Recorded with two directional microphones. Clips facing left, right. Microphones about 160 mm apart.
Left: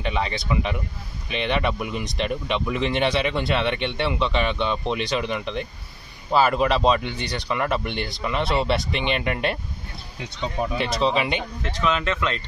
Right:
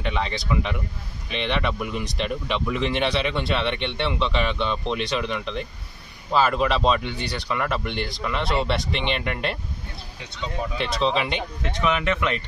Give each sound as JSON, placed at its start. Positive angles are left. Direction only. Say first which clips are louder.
{"t": 0.0, "sound": "speech", "louder": "left 1 dB", "side_deg": 0}
{"t": 10.8, "sound": "speech", "louder": "even", "side_deg": 5}
{"t": 11.6, "sound": "speech", "louder": "right 1 dB", "side_deg": -15}